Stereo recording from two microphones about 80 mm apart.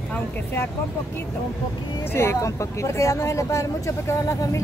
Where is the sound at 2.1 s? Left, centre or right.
Left.